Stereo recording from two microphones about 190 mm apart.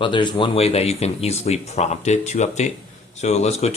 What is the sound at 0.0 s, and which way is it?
Speech, 25° left (ahead or behind).